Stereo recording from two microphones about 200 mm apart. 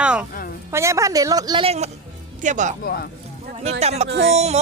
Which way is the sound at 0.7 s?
15° right (ahead or behind).